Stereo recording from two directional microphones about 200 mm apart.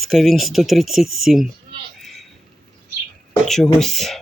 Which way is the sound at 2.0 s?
Centre (ahead or behind).